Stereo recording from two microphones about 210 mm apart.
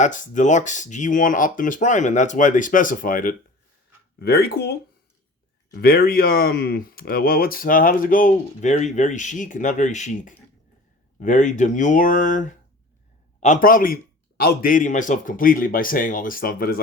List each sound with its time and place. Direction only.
0.0 s speech: 35° left (ahead or behind)
5.8 s speech: 45° left (ahead or behind)